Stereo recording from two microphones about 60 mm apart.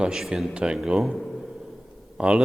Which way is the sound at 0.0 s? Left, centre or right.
Centre.